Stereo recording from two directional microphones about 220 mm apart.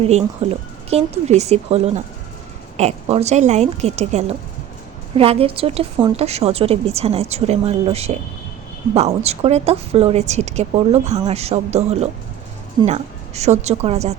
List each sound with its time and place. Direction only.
0.0 s a woman's voice: 30° right (ahead or behind)